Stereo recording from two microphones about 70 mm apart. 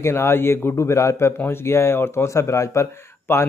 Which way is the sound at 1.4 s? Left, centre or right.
Left.